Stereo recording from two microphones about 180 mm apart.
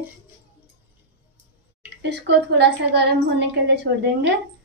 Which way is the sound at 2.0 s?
70° right (ahead or behind).